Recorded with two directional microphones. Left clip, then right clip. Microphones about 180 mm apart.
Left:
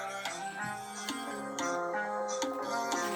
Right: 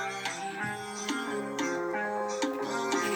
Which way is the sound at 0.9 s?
20° left (ahead or behind).